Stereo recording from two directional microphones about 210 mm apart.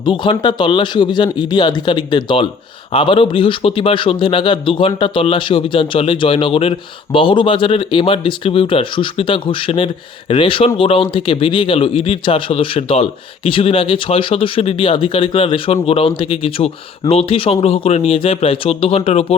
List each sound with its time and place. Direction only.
0.0 s speech: 20° left (ahead or behind)